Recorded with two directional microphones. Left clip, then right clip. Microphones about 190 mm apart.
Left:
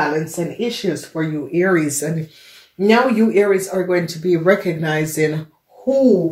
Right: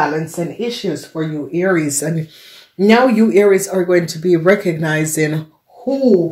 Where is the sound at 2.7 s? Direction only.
50° right (ahead or behind).